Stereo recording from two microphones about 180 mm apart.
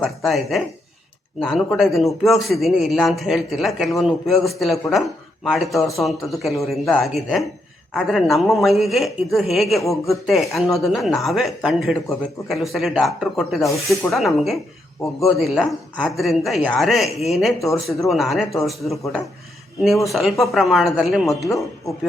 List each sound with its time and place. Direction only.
0.0 s a man's voice: centre (ahead or behind)